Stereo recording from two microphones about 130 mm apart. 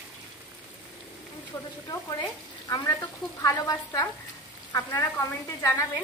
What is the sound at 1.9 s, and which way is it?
Speech, 30° left (ahead or behind).